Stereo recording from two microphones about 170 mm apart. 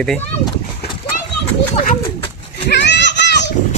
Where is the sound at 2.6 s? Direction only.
85° left.